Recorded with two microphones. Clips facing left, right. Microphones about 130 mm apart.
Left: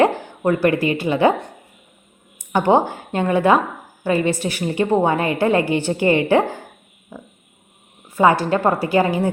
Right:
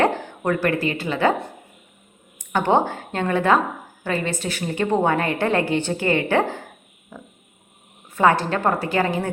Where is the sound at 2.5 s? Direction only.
10° left (ahead or behind).